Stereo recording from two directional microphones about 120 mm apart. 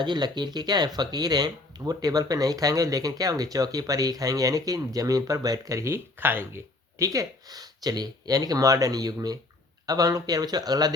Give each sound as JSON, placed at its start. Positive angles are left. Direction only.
{"t": 0.0, "sound": "speech", "side_deg": -40}
{"t": 7.0, "sound": "speech", "side_deg": -30}